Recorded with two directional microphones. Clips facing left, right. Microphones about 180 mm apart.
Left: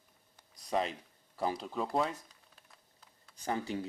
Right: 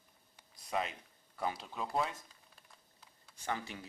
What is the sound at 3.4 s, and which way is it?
Speech, 30° left (ahead or behind).